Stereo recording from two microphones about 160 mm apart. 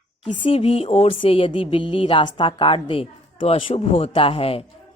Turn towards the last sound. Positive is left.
turn(degrees=35)  # may be behind; listen again after turning